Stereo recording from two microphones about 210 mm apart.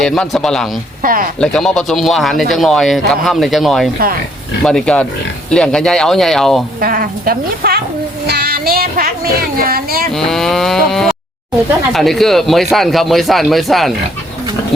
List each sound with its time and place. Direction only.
0.0 s speech: 5° left (ahead or behind)
1.0 s speech: 45° right (ahead or behind)
1.4 s speech: 5° left (ahead or behind)
6.7 s speech: 45° right (ahead or behind)
8.3 s music: 45° right (ahead or behind)
9.6 s speech: 45° right (ahead or behind)
10.1 s speech: centre (ahead or behind)